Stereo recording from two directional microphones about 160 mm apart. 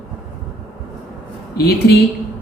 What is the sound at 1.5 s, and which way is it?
Speech, 85° left.